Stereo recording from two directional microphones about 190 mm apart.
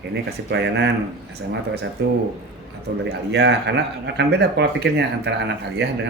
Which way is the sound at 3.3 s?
65° right (ahead or behind).